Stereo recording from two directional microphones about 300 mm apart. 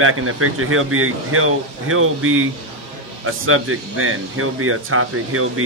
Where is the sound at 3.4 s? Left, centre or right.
Right.